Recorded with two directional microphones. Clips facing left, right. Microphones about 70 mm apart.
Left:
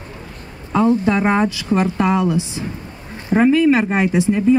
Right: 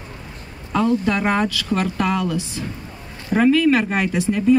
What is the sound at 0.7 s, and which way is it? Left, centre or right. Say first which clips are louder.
Speech: left 3 dB; left.